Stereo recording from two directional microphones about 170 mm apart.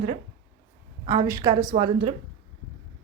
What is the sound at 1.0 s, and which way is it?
Speech, 20° right (ahead or behind).